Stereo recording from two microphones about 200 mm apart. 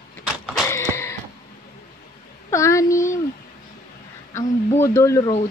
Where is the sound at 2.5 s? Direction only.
15° left (ahead or behind).